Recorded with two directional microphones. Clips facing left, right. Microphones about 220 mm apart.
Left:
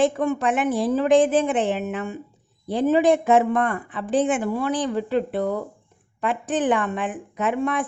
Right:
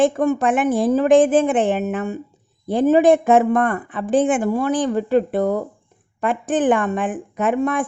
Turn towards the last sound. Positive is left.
turn(degrees=-50)  # may be behind; listen again after turning